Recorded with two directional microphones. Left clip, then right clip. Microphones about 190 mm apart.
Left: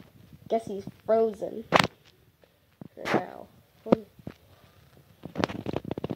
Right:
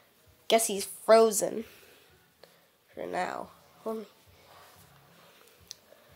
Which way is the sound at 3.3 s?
35° right (ahead or behind).